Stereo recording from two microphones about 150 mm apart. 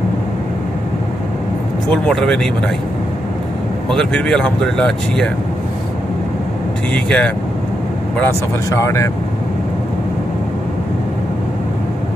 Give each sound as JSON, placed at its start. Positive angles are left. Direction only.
{"t": 1.9, "sound": "speech", "side_deg": 5}
{"t": 3.9, "sound": "speech", "side_deg": 5}
{"t": 6.9, "sound": "speech", "side_deg": 5}
{"t": 8.2, "sound": "speech", "side_deg": 20}